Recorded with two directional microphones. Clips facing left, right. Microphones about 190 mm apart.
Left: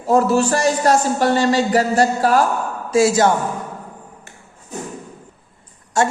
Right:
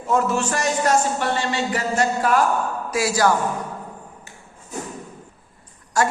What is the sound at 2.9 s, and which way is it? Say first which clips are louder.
Speech: left 6 dB; 25° left (ahead or behind).